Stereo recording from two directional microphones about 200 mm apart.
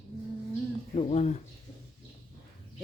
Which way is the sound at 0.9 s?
35° left (ahead or behind).